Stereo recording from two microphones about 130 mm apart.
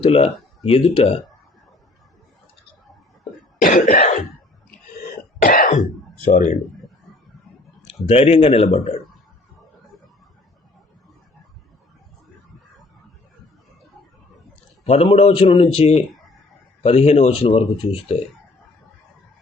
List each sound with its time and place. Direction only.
0.0 s speech: 50° left (ahead or behind)
3.6 s cough: 80° left
5.4 s throat clearing: 90° left
6.3 s speech: 70° left (ahead or behind)
8.0 s speech: 50° left (ahead or behind)
14.8 s speech: 50° left (ahead or behind)